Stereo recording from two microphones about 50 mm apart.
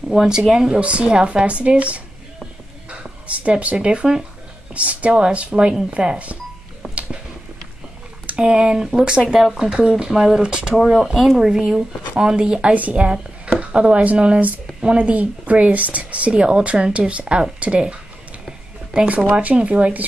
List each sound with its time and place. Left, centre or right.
0.3 s speech: centre
3.4 s speech: right
8.3 s speech: centre
9.7 s speech: centre
12.7 s speech: right
18.9 s speech: right